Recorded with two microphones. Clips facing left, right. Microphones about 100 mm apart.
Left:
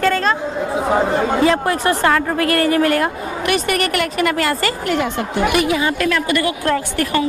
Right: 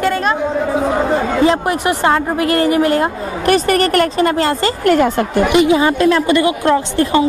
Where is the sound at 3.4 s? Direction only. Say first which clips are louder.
Right 6 dB; 35° right (ahead or behind).